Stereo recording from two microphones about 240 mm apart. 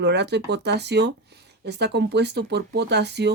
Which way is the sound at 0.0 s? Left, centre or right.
Right.